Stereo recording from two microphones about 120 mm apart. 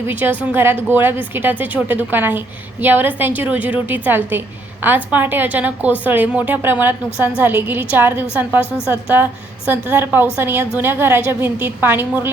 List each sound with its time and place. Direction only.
0.1 s a woman's voice: 15° right (ahead or behind)